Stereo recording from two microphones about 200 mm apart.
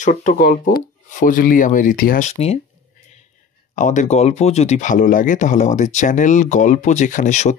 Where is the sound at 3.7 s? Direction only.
40° left (ahead or behind).